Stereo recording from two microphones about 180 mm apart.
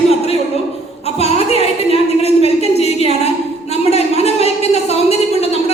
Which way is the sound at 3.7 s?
35° left (ahead or behind).